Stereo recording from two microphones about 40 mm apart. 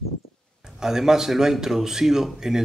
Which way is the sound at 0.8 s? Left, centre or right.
Centre.